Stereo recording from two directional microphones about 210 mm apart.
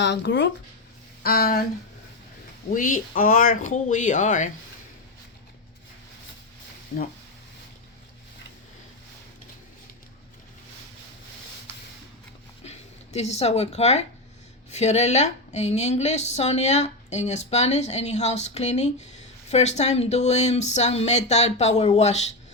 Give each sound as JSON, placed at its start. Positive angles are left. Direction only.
{"t": 0.0, "sound": "speech", "side_deg": 55}
{"t": 1.2, "sound": "speech", "side_deg": 45}
{"t": 2.6, "sound": "a woman's voice", "side_deg": 40}
{"t": 12.6, "sound": "a woman's voice", "side_deg": 30}